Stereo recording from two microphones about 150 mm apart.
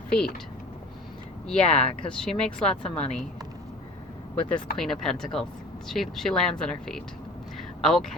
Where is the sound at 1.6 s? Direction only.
40° left (ahead or behind).